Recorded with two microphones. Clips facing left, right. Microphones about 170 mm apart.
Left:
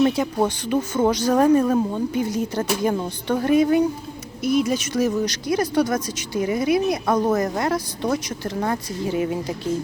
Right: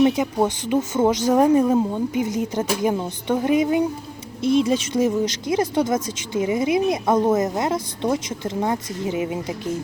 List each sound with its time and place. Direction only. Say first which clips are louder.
0.0 s speech: right 1 dB; 15° right (ahead or behind)